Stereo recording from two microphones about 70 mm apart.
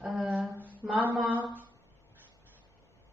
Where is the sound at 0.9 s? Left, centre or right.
Right.